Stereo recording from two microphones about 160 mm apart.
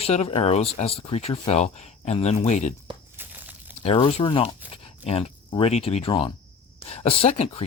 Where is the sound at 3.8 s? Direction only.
35° left (ahead or behind).